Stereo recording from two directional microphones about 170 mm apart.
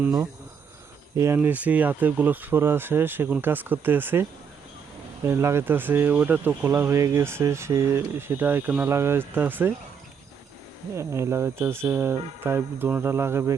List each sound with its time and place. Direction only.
1.1 s speech: 15° right (ahead or behind)
10.9 s speech: 15° right (ahead or behind)